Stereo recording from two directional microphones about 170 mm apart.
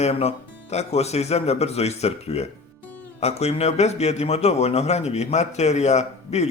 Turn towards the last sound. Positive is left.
turn(degrees=40)  # may be behind; listen again after turning